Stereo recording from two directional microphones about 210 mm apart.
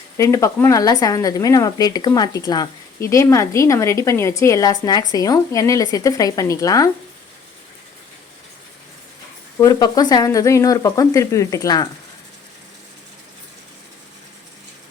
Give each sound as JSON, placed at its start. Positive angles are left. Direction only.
{"t": 0.2, "sound": "a woman's voice", "side_deg": 15}
{"t": 9.6, "sound": "a woman's voice", "side_deg": 15}